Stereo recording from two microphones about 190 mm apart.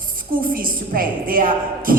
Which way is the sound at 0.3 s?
50° right (ahead or behind).